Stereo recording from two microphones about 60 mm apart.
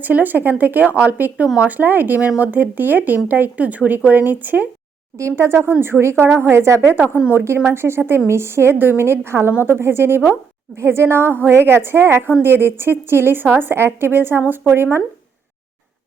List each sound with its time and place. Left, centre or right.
0.0 s a woman's voice: right
5.1 s a woman's voice: right